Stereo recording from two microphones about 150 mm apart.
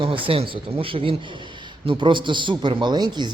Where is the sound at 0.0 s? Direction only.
35° right (ahead or behind).